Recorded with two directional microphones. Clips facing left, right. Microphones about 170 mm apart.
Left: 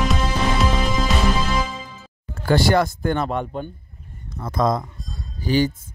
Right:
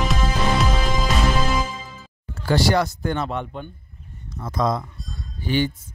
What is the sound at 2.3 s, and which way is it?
Speech, 50° left (ahead or behind).